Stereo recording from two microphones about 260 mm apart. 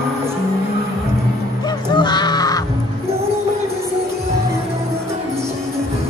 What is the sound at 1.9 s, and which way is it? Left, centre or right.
Crow, centre.